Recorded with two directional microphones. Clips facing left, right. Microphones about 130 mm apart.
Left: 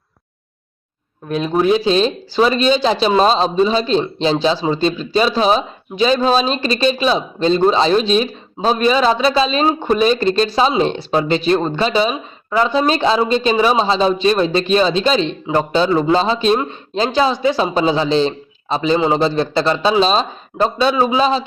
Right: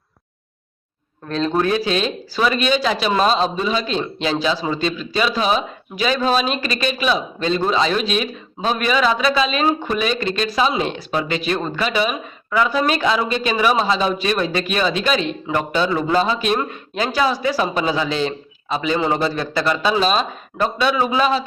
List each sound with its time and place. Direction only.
1.3 s speech: 10° left (ahead or behind); by 21.4 s 25° left (ahead or behind)